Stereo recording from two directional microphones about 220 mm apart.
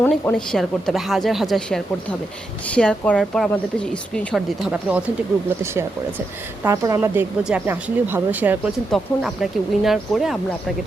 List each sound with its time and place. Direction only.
0.0 s speech: 5° left (ahead or behind)
6.7 s speech: 15° right (ahead or behind)